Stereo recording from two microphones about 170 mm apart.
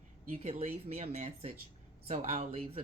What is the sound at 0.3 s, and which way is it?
Speech, 40° right (ahead or behind).